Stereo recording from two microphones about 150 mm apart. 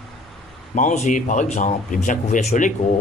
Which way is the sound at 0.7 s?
55° left (ahead or behind).